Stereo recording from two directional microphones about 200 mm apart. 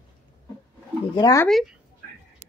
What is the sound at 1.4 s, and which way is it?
Speech, centre (ahead or behind).